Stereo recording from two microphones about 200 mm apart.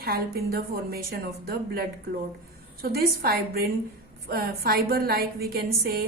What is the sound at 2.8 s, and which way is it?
A woman's voice, 50° right (ahead or behind).